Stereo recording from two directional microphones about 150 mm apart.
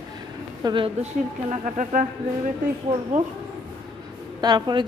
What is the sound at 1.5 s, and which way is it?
Speech, 55° right (ahead or behind).